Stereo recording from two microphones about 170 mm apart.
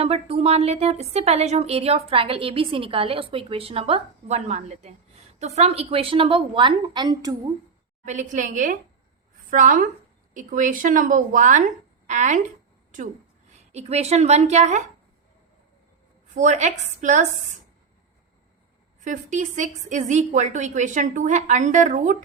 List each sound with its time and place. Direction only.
0.0 s a woman's voice: 35° right (ahead or behind)
8.0 s a woman's voice: 45° right (ahead or behind)
13.5 s a woman's voice: 40° right (ahead or behind)
16.3 s a woman's voice: 45° right (ahead or behind)
18.9 s a woman's voice: 45° right (ahead or behind)